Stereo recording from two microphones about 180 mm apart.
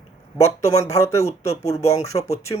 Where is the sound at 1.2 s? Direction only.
35° left (ahead or behind).